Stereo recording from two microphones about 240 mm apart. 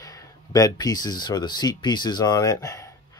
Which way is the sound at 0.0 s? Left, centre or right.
Centre.